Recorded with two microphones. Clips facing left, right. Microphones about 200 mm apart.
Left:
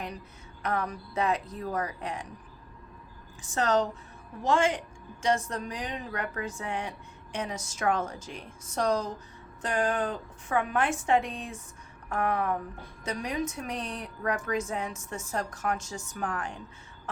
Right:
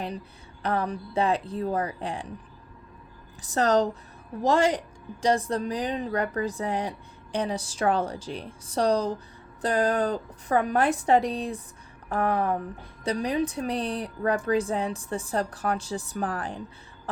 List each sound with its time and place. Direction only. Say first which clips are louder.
0.6 s a woman's voice: right 4 dB; 30° right (ahead or behind)
3.4 s a woman's voice: right 4 dB; 35° right (ahead or behind)